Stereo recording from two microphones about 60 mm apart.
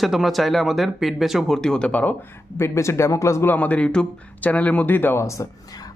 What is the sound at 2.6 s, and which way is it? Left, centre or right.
Speech, left.